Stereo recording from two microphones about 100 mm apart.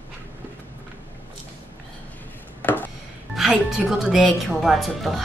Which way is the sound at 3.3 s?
5° right (ahead or behind).